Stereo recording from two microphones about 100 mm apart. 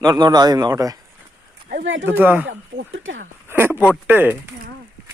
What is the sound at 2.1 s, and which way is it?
Speech, 20° right (ahead or behind).